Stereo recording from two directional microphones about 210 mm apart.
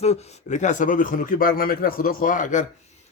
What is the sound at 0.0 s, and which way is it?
A man's voice, 30° left (ahead or behind).